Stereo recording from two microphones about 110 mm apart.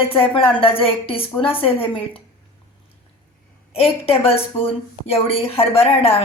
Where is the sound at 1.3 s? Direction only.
15° left (ahead or behind).